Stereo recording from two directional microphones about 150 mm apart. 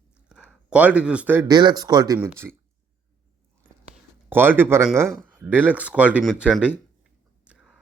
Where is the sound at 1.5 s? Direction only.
25° right (ahead or behind).